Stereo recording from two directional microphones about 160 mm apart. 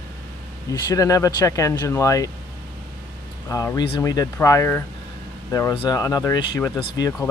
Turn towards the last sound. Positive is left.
turn(degrees=20)  # may be behind; listen again after turning